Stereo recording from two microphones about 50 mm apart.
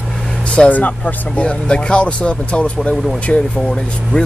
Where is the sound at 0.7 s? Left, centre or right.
Left.